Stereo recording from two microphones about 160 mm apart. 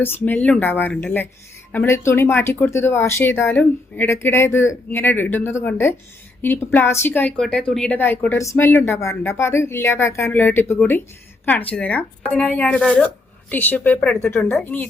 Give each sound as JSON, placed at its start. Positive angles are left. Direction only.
{"t": 0.0, "sound": "speech", "side_deg": 10}